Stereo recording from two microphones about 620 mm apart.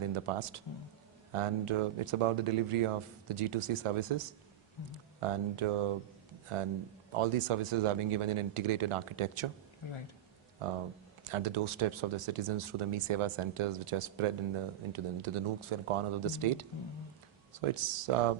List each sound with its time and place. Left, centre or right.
0.0 s speech: right
9.8 s speech: left
11.2 s speech: right